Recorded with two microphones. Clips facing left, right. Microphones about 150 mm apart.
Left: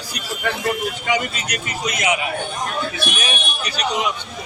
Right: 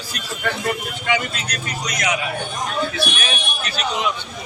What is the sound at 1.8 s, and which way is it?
Speech, 20° left (ahead or behind).